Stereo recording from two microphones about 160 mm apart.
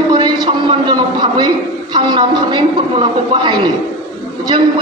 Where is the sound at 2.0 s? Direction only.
30° right (ahead or behind).